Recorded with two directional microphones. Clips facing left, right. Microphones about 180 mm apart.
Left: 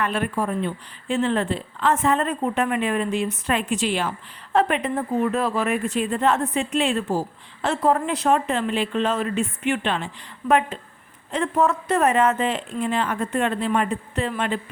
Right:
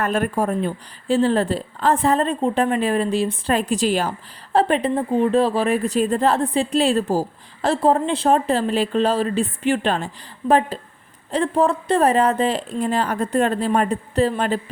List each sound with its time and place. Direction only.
0.0 s speech: 45° right (ahead or behind)